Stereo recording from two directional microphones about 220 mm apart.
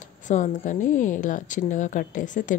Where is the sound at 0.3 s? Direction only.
35° left (ahead or behind).